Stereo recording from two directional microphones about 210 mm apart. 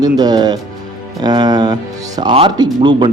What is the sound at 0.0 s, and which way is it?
Speech, 20° right (ahead or behind).